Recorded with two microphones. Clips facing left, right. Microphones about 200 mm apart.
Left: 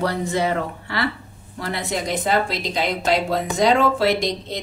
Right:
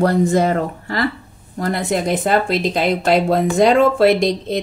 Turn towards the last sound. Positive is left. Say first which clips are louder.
# right 6 dB
turn(degrees=-55)  # may be behind; listen again after turning